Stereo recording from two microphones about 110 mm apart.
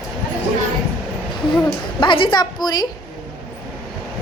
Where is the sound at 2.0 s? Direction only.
50° left (ahead or behind).